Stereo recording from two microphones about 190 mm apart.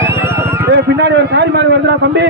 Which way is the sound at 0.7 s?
60° right (ahead or behind).